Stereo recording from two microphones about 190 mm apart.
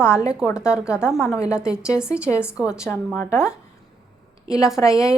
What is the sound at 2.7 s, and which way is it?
A woman's voice, 15° left (ahead or behind).